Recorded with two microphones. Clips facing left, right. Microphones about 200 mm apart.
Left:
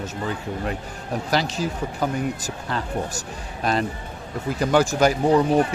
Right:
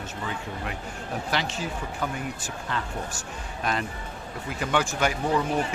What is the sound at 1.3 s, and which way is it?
Speech, 40° left (ahead or behind).